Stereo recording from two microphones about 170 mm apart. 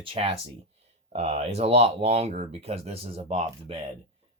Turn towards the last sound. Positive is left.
turn(degrees=-35)  # may be behind; listen again after turning